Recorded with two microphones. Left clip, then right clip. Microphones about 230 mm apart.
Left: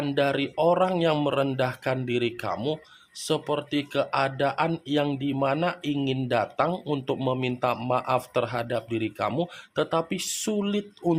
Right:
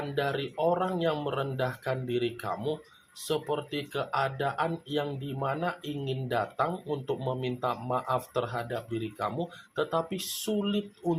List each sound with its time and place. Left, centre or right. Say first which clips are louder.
0.1 s speech: left 7 dB; left